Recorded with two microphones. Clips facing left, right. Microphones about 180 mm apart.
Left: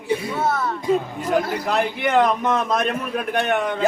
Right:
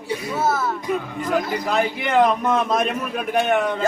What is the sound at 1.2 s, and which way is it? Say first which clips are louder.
A man's voice: left 1 dB; 10° left (ahead or behind).